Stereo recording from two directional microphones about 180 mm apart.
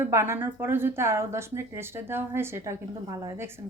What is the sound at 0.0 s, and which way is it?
A woman's voice, 15° right (ahead or behind).